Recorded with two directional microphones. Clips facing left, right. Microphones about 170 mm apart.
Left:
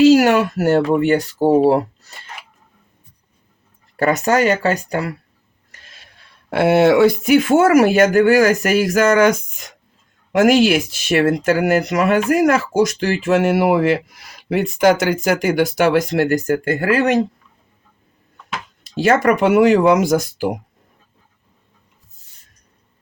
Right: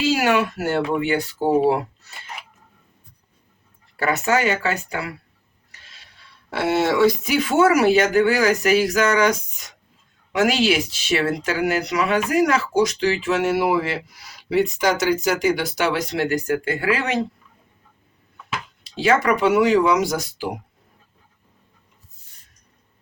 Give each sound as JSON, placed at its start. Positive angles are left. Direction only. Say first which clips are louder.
{"t": 0.0, "sound": "speech", "louder": "left 8 dB", "side_deg": 40}
{"t": 3.9, "sound": "speech", "louder": "left 5 dB", "side_deg": 40}
{"t": 18.8, "sound": "speech", "louder": "left 4 dB", "side_deg": 45}